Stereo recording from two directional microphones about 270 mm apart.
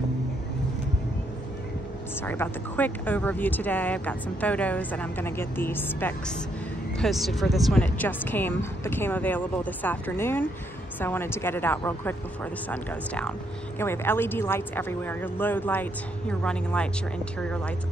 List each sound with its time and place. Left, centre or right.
2.2 s speech: centre